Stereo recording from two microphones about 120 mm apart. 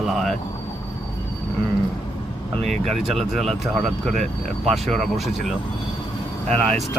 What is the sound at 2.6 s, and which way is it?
Speech, 65° right (ahead or behind).